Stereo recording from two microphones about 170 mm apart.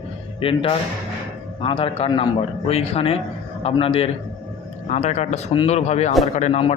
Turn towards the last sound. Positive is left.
turn(degrees=35)  # may be behind; listen again after turning